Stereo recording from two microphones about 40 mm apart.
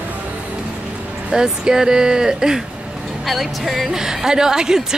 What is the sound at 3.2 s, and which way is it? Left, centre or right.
Speech, centre.